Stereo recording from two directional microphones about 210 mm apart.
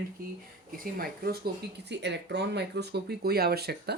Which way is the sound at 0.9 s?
45° right (ahead or behind).